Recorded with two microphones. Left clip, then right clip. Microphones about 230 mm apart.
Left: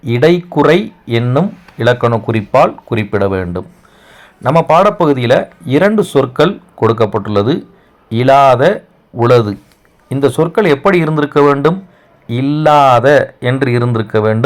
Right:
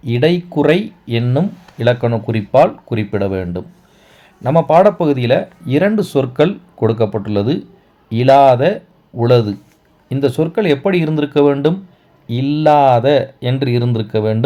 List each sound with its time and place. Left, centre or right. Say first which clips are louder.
0.1 s a man's voice: left 4 dB; centre